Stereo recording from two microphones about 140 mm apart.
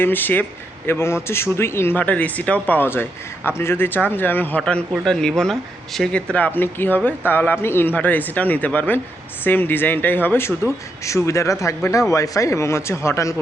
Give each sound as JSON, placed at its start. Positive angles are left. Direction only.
{"t": 0.0, "sound": "speech", "side_deg": 15}